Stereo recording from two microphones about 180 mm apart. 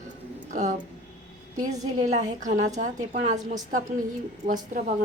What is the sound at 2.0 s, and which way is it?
A woman's voice, 40° right (ahead or behind).